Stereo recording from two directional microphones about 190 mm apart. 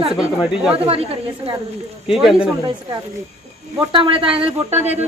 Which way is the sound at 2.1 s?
5° right (ahead or behind).